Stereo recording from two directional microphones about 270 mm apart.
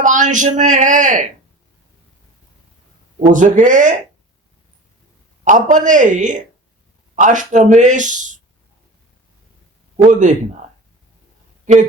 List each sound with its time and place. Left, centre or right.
0.0 s speech: right
3.3 s speech: right
5.5 s speech: right
10.1 s speech: right
11.6 s speech: right